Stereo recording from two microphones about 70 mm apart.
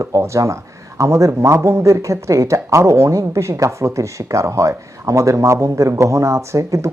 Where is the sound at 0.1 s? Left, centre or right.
Right.